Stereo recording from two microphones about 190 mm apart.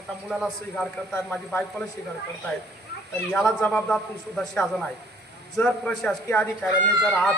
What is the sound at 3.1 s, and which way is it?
A man's voice, 5° left (ahead or behind).